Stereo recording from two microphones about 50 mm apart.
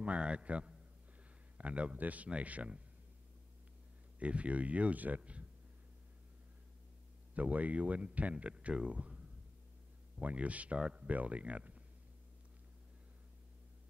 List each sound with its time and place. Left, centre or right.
0.0 s speech: right
4.2 s speech: right
7.3 s speech: right
10.2 s speech: right